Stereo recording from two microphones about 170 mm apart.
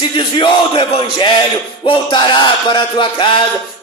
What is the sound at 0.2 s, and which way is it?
Speech, 30° left (ahead or behind).